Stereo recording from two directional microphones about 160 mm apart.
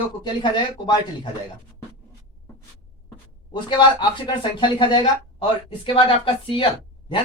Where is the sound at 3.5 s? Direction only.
30° left (ahead or behind).